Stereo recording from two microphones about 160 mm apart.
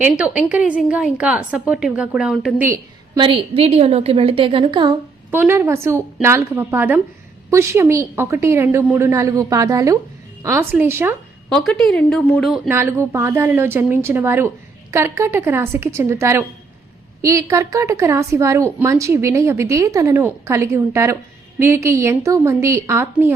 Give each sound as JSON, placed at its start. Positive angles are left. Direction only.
{"t": 0.0, "sound": "a woman's voice", "side_deg": -10}
{"t": 3.2, "sound": "a woman's voice", "side_deg": -35}
{"t": 5.3, "sound": "a woman's voice", "side_deg": -15}
{"t": 11.4, "sound": "a woman's voice", "side_deg": 5}
{"t": 12.6, "sound": "a woman's voice", "side_deg": -15}